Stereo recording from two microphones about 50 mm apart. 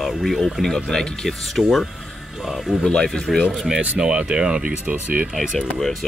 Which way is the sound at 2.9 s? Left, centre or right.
Centre.